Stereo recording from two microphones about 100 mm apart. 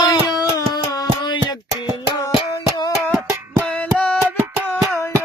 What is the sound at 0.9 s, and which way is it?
Music, 50° left (ahead or behind).